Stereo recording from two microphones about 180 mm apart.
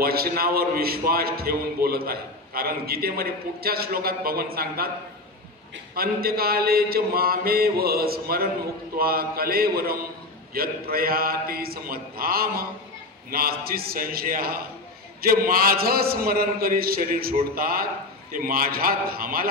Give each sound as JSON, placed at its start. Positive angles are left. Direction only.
{"t": 0.0, "sound": "a man's voice", "side_deg": -55}
{"t": 5.9, "sound": "a man's voice", "side_deg": -55}